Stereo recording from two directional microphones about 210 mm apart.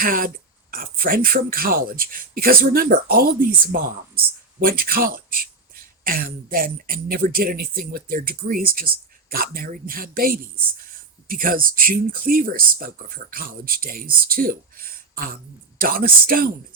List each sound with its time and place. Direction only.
0.0 s speech: 45° right (ahead or behind)